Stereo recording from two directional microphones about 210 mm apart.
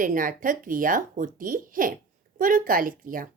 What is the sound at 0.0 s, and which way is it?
Speech, 40° right (ahead or behind).